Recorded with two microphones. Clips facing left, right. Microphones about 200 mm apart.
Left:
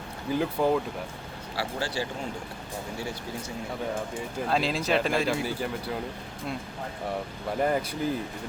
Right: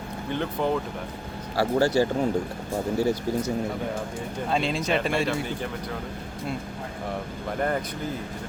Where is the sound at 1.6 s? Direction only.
45° right (ahead or behind).